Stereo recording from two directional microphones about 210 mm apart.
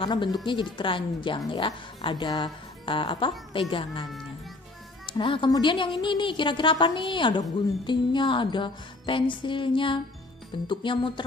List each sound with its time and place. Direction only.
0.0 s a woman's voice: 20° left (ahead or behind)
5.1 s a woman's voice: 25° left (ahead or behind)